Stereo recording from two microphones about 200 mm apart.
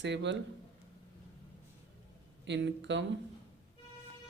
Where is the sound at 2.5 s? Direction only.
65° right (ahead or behind).